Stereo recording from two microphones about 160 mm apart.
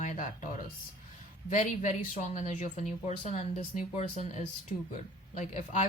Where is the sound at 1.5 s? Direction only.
50° left (ahead or behind).